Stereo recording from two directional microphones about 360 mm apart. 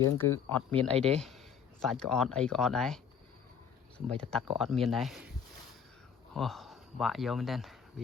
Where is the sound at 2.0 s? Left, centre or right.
Centre.